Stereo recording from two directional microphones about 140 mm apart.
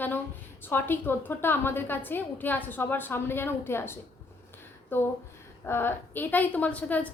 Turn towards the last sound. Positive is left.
turn(degrees=10)  # may be behind; listen again after turning